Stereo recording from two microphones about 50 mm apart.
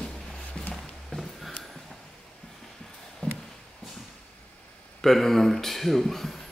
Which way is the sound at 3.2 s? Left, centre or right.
Left.